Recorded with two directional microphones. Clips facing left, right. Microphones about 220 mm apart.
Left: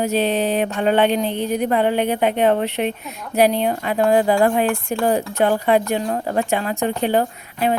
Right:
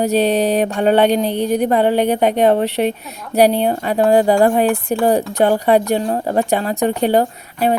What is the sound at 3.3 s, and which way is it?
A woman's voice, 35° right (ahead or behind).